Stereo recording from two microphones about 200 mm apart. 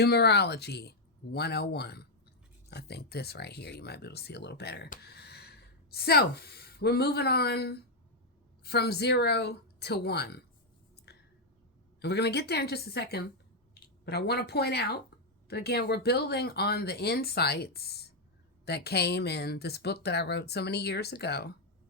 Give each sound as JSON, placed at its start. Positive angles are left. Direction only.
{"t": 0.0, "sound": "speech", "side_deg": 55}
{"t": 10.9, "sound": "a sound", "side_deg": 55}
{"t": 11.9, "sound": "speech", "side_deg": 55}